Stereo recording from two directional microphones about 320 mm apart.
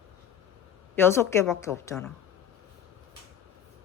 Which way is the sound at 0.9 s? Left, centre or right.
Centre.